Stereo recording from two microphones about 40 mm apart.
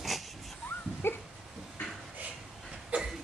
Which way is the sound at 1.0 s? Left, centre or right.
Left.